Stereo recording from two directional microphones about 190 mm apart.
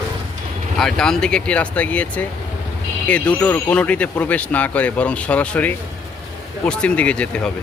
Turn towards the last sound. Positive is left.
turn(degrees=5)  # may be behind; listen again after turning